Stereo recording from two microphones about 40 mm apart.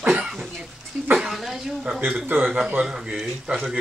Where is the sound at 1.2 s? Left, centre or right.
Centre.